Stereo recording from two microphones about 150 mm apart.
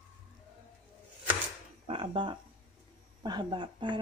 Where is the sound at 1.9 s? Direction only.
35° right (ahead or behind).